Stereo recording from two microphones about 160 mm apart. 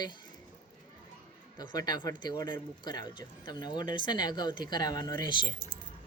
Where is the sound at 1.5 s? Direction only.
25° left (ahead or behind).